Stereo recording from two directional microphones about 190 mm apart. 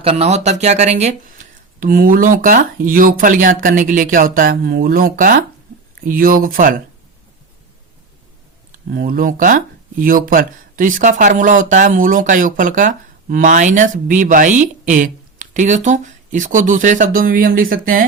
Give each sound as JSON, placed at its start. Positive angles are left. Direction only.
{"t": 0.0, "sound": "speech", "side_deg": -30}
{"t": 8.9, "sound": "speech", "side_deg": -50}